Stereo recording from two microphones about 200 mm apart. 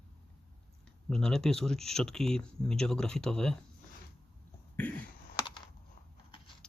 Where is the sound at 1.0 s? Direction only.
5° left (ahead or behind).